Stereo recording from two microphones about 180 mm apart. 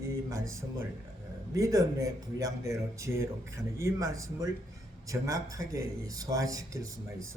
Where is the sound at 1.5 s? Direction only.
20° right (ahead or behind).